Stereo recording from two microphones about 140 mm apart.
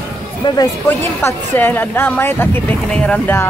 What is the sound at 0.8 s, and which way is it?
Speech, 15° left (ahead or behind).